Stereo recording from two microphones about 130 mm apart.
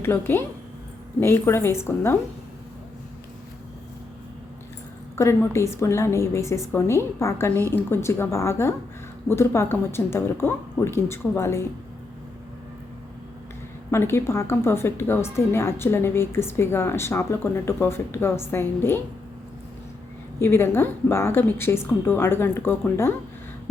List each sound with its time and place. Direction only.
0.0 s a woman's voice: 20° left (ahead or behind)
5.1 s a woman's voice: 20° left (ahead or behind)
13.9 s a woman's voice: 20° left (ahead or behind)
20.4 s a woman's voice: 20° left (ahead or behind)